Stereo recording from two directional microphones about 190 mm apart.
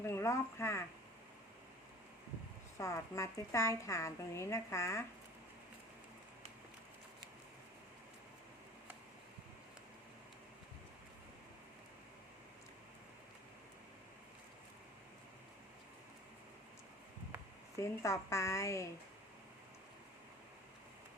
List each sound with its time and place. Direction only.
0.0 s speech: 15° left (ahead or behind)
2.7 s a woman's voice: 15° left (ahead or behind)
17.7 s a woman's voice: 15° left (ahead or behind)